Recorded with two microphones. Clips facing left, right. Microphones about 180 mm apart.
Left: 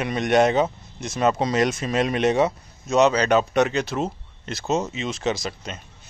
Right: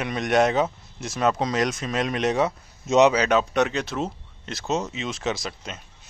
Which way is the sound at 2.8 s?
20° right (ahead or behind).